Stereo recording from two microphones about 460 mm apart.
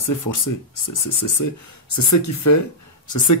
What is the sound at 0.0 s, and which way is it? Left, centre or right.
Speech, left.